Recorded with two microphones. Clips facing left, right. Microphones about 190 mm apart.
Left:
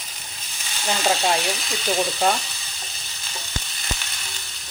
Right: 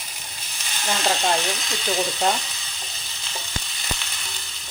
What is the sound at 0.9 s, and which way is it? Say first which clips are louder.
Speech: left 1 dB; 10° left (ahead or behind).